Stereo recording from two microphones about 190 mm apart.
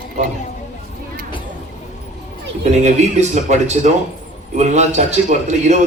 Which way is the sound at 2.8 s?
40° right (ahead or behind).